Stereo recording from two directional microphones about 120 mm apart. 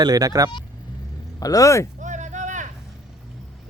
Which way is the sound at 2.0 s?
85° right.